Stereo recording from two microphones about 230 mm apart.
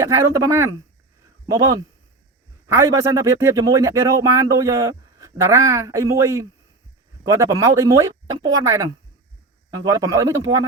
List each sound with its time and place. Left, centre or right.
0.0 s speech: centre